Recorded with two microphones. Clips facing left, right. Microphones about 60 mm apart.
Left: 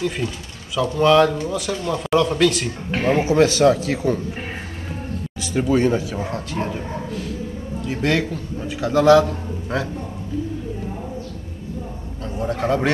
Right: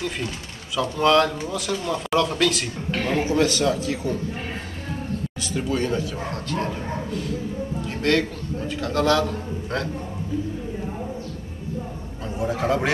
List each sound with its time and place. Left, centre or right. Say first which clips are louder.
0.7 s speech: left 4 dB; centre
2.9 s speech: left 5 dB; centre
3.6 s a man's voice: left 6 dB; left
5.4 s speech: left 8 dB; left
8.0 s a man's voice: even; centre
12.4 s speech: left 2 dB; centre